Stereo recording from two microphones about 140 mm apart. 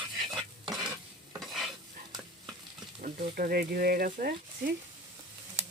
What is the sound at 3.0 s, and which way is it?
Speech, 75° right (ahead or behind).